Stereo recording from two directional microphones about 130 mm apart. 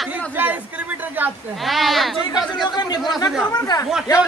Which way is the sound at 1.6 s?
Centre (ahead or behind).